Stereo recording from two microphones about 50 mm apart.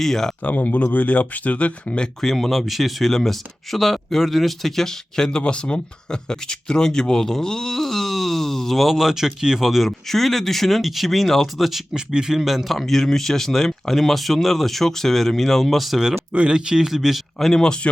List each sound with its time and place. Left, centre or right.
0.0 s speech: centre
0.4 s speech: left
2.2 s speech: centre
11.9 s speech: centre
12.5 s speech: centre
16.3 s speech: right; by 17.2 s centre
17.4 s speech: centre